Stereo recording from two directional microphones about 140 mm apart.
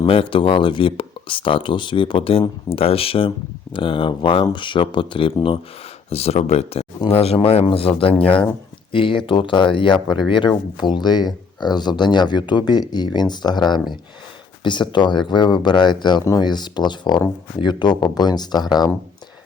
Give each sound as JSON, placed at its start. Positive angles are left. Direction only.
{"t": 0.0, "sound": "speech", "side_deg": 40}